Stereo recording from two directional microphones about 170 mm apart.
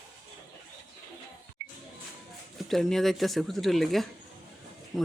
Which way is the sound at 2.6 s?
Centre (ahead or behind).